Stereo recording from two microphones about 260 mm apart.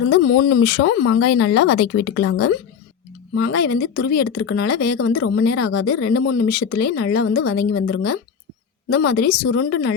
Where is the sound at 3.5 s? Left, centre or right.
Left.